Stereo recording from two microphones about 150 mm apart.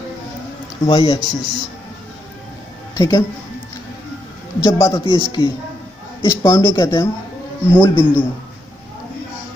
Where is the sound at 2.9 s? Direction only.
25° left (ahead or behind).